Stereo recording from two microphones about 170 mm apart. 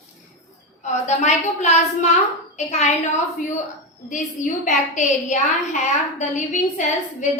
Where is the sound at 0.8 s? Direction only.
40° left (ahead or behind).